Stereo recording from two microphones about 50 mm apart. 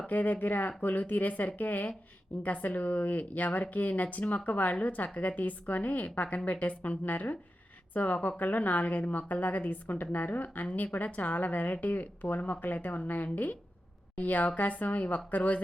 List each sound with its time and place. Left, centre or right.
0.1 s a woman's voice: left